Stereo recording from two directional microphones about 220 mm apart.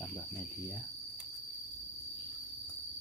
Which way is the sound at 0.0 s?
10° left (ahead or behind).